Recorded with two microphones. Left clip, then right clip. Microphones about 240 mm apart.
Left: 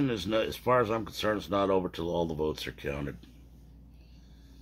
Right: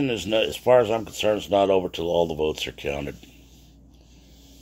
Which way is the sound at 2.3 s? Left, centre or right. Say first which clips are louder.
Right 7 dB; left.